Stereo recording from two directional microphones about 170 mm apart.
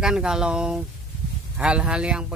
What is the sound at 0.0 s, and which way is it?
Speech, 5° right (ahead or behind).